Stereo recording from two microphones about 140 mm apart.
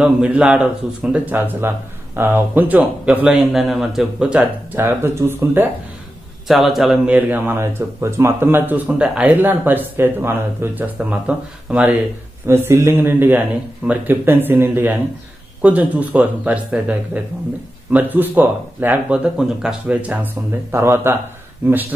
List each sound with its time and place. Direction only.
0.0 s speech: 5° right (ahead or behind)
6.4 s speech: centre (ahead or behind)
20.7 s speech: 20° right (ahead or behind)